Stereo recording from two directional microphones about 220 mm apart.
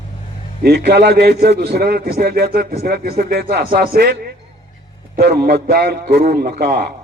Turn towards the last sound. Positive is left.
turn(degrees=-45)  # may be behind; listen again after turning